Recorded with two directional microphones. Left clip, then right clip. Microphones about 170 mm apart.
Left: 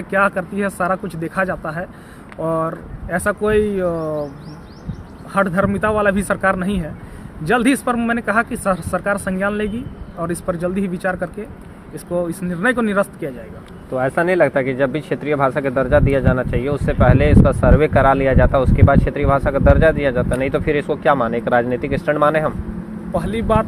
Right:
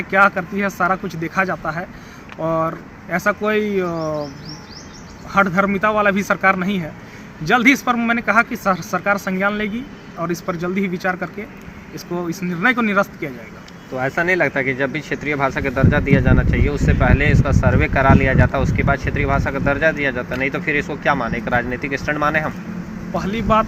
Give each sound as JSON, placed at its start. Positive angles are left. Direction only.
{"t": 0.2, "sound": "a man's voice", "side_deg": 45}
{"t": 2.4, "sound": "speech", "side_deg": 35}
{"t": 3.4, "sound": "a man's voice", "side_deg": 45}
{"t": 3.8, "sound": "speech", "side_deg": 15}
{"t": 5.3, "sound": "a man's voice", "side_deg": 45}
{"t": 12.3, "sound": "a man's voice", "side_deg": 50}
{"t": 13.9, "sound": "speech", "side_deg": 90}
{"t": 23.2, "sound": "a man's voice", "side_deg": 45}